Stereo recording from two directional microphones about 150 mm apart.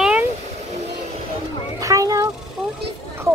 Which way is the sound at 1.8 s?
20° right (ahead or behind).